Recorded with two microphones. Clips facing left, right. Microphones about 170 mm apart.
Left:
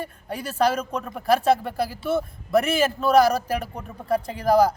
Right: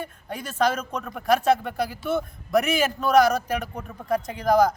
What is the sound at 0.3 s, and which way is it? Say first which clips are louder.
A man's voice: left 2 dB; 35° left (ahead or behind).